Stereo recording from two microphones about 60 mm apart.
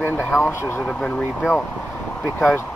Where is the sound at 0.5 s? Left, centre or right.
Left.